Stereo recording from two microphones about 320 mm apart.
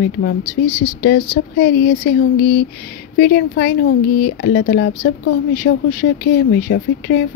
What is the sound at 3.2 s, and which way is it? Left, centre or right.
Speech, left.